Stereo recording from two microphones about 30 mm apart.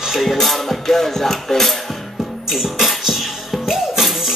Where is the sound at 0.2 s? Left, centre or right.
Centre.